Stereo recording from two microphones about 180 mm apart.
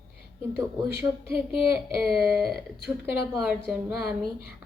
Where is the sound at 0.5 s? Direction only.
15° right (ahead or behind).